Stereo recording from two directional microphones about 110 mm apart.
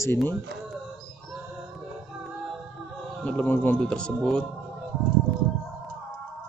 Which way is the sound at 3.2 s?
15° left (ahead or behind).